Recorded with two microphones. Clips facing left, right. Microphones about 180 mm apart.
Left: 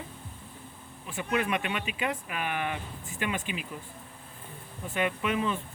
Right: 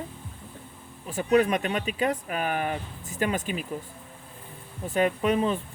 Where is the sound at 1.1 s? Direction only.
40° right (ahead or behind).